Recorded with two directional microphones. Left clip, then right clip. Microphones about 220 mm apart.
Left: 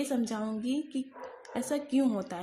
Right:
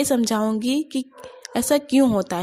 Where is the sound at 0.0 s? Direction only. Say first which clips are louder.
Right 12 dB; 40° right (ahead or behind).